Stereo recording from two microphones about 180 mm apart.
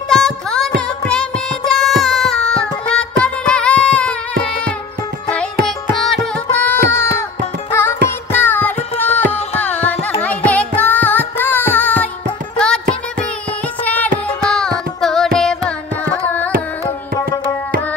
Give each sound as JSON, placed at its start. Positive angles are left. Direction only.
{"t": 0.1, "sound": "music", "side_deg": 5}
{"t": 5.9, "sound": "music", "side_deg": 0}
{"t": 9.1, "sound": "music", "side_deg": 35}
{"t": 9.6, "sound": "carnatic music", "side_deg": 10}
{"t": 12.5, "sound": "music", "side_deg": 5}
{"t": 13.8, "sound": "music", "side_deg": 10}
{"t": 14.5, "sound": "carnatic music", "side_deg": 5}